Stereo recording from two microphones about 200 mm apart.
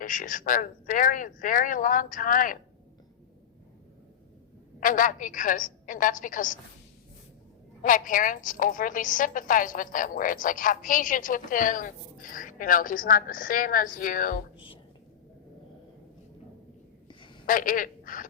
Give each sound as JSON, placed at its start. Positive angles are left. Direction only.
{"t": 0.0, "sound": "a woman's voice", "side_deg": 40}
{"t": 4.8, "sound": "a woman's voice", "side_deg": 40}
{"t": 7.8, "sound": "a woman's voice", "side_deg": 40}
{"t": 17.1, "sound": "a sound", "side_deg": 25}
{"t": 17.4, "sound": "speech", "side_deg": 40}